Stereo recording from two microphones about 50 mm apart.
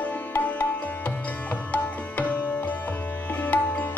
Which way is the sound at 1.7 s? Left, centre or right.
Left.